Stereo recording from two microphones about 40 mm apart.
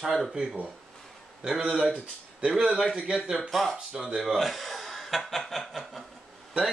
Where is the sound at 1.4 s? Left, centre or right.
Centre.